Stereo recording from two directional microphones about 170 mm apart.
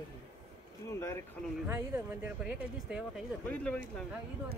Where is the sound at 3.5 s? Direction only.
10° left (ahead or behind).